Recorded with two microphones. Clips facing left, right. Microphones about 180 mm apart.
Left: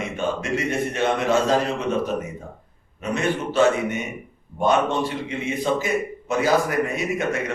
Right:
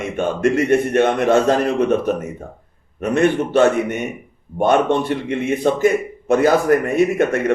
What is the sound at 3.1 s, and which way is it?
Speech, 60° right (ahead or behind).